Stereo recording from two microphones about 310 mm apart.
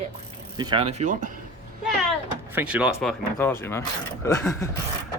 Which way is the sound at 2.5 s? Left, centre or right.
Centre.